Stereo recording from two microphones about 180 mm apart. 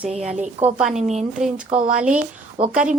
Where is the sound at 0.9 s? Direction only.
40° right (ahead or behind).